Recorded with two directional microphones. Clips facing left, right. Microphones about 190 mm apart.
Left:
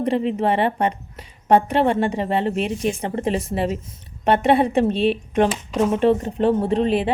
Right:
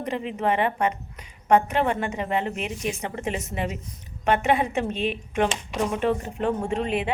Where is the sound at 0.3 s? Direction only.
30° left (ahead or behind).